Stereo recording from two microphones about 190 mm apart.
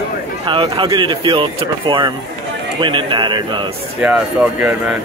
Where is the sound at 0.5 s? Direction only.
25° right (ahead or behind).